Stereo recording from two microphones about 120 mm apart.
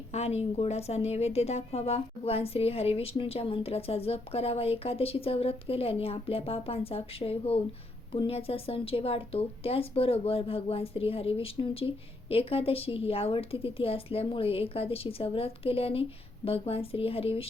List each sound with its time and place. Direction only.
0.1 s speech: 60° left (ahead or behind)